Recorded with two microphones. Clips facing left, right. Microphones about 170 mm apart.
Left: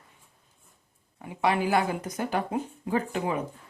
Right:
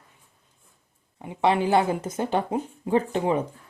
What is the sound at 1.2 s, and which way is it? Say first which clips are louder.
Speech: right 4 dB; 25° right (ahead or behind).